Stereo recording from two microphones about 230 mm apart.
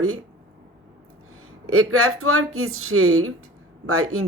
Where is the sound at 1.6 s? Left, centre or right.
Right.